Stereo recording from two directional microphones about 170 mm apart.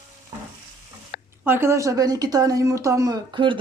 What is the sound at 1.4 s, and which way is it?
Speech, 15° right (ahead or behind).